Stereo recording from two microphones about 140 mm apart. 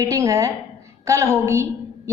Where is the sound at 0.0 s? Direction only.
20° right (ahead or behind).